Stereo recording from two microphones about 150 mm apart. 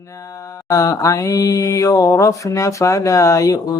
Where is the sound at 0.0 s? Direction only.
20° left (ahead or behind).